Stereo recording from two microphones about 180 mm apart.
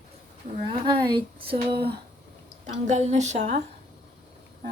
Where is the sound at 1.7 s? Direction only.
60° right (ahead or behind).